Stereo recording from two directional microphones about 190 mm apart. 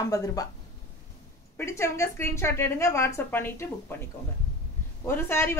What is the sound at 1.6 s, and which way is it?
A woman's voice, 15° left (ahead or behind).